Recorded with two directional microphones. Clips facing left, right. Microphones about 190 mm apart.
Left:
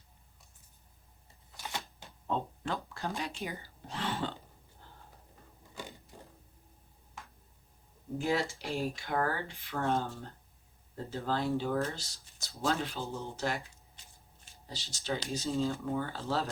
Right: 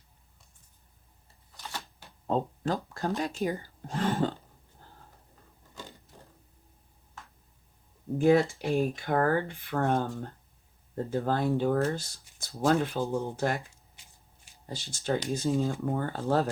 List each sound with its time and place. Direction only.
1.5 s a sound: 15° left (ahead or behind)
2.2 s speech: 40° right (ahead or behind)
7.2 s tick-tock: 10° left (ahead or behind)
8.2 s speech: 55° right (ahead or behind)
14.7 s speech: 50° right (ahead or behind)